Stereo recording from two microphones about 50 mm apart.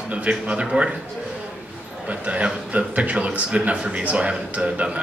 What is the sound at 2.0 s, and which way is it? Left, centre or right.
Speech, right.